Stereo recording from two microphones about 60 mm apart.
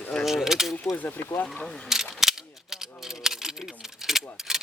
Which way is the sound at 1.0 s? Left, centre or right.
Left.